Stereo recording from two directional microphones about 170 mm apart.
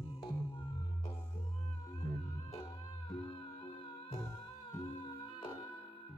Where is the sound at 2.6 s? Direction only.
30° left (ahead or behind).